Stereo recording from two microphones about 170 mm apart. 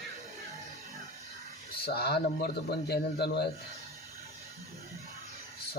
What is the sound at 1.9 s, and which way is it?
Speech, 70° left (ahead or behind).